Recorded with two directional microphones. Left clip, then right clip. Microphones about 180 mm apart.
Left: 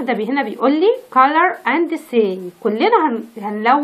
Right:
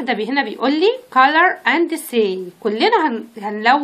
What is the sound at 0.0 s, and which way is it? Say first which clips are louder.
Speech: even; 25° right (ahead or behind).